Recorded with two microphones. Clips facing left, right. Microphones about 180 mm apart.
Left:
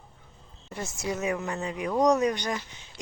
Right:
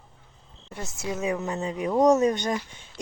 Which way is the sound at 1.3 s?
20° right (ahead or behind).